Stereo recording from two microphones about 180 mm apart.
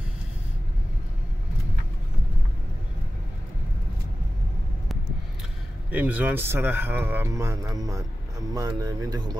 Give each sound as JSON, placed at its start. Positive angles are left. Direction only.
{"t": 5.9, "sound": "speech", "side_deg": -10}